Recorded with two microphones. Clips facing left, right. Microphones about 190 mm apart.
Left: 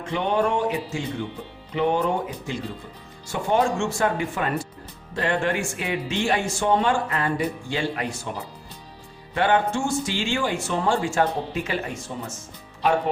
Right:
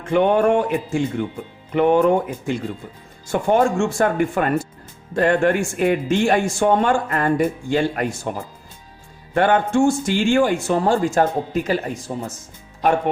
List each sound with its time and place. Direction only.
0.0 s speech: 55° right (ahead or behind)